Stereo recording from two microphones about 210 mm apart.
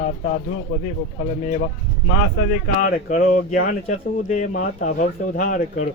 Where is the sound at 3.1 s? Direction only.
35° left (ahead or behind).